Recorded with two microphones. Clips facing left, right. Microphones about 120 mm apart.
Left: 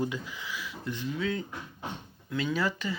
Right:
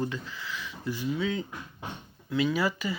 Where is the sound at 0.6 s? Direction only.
Centre (ahead or behind).